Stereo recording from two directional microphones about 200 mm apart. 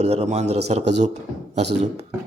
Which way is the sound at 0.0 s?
35° right (ahead or behind).